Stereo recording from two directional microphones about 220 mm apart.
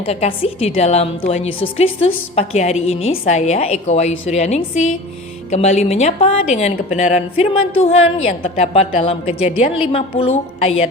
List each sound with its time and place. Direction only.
0.0 s a woman's voice: 25° left (ahead or behind)